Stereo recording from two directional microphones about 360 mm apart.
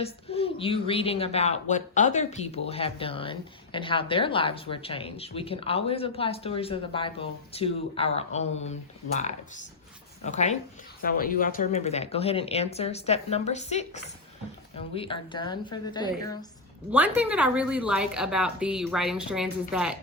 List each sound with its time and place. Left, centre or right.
0.0 s a woman's voice: centre
9.1 s a woman's voice: centre
16.9 s a woman's voice: centre